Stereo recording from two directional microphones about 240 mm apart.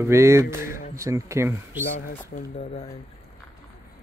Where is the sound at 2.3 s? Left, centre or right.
Left.